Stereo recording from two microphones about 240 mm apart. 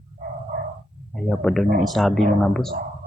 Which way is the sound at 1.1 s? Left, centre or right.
Centre.